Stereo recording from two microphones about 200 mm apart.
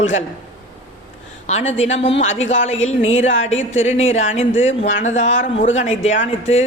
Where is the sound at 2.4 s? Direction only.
70° left (ahead or behind).